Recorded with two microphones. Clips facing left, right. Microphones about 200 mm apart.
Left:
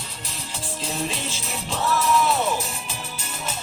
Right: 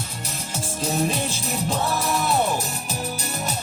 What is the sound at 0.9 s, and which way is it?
Music, 45° right (ahead or behind).